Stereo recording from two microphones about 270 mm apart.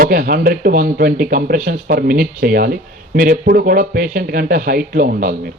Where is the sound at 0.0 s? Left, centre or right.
Right.